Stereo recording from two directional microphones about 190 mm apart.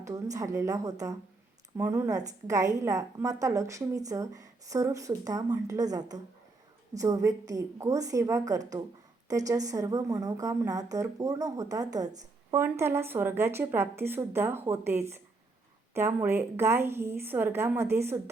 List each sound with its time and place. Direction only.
0.0 s speech: 15° right (ahead or behind)